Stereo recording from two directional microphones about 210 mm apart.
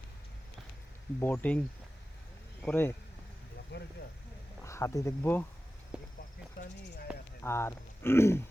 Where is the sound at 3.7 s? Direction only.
55° left (ahead or behind).